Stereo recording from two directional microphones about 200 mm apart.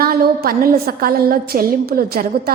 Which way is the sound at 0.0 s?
50° right (ahead or behind).